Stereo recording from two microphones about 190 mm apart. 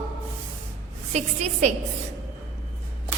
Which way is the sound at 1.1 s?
35° right (ahead or behind).